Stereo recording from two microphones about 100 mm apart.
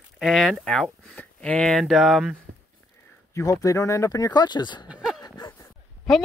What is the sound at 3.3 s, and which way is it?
Speech, 35° left (ahead or behind).